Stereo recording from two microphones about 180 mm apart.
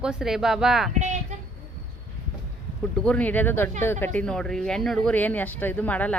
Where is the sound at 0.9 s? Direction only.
40° right (ahead or behind).